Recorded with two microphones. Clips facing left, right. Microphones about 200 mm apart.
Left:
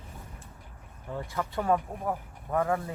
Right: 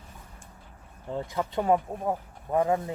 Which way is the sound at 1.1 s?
20° right (ahead or behind).